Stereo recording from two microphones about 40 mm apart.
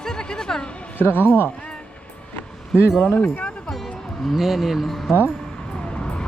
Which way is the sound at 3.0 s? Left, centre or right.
Left.